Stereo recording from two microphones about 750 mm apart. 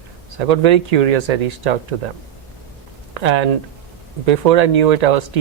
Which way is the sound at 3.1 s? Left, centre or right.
Right.